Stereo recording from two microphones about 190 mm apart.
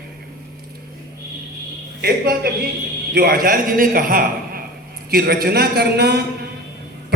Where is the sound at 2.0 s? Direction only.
55° right (ahead or behind).